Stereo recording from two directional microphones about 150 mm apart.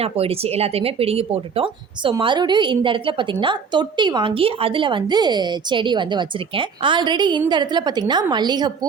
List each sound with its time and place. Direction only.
0.0 s a woman's voice: 40° right (ahead or behind)